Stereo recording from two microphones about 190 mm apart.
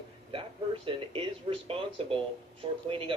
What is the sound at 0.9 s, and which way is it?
Speech, 30° right (ahead or behind).